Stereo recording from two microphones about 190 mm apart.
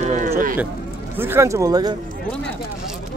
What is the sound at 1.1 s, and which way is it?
Speech, 10° right (ahead or behind).